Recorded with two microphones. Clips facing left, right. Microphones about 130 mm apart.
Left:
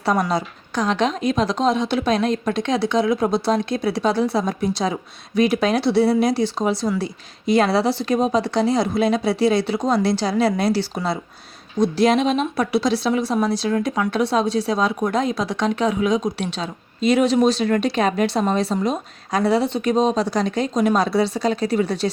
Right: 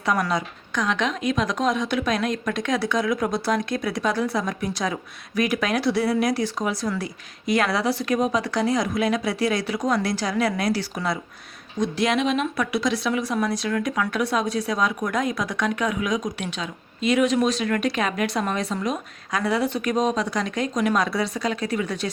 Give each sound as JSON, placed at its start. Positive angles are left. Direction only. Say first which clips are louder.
{"t": 0.3, "sound": "speech", "louder": "left 3 dB", "side_deg": 35}